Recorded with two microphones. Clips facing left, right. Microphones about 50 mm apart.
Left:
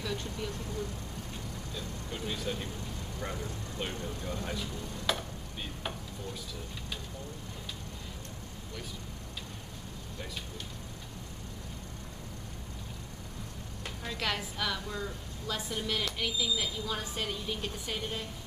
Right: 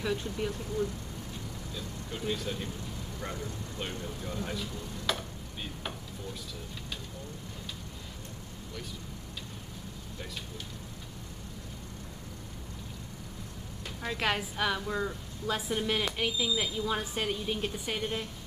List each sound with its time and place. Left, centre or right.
0.0 s speech: centre
1.8 s speech: centre
14.0 s a woman's voice: centre